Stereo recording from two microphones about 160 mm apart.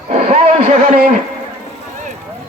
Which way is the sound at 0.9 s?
65° right (ahead or behind).